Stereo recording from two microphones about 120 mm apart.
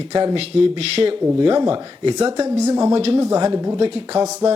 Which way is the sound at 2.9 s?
45° right (ahead or behind).